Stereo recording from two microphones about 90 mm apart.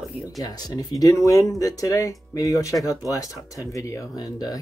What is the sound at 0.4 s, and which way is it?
Speech, 45° left (ahead or behind).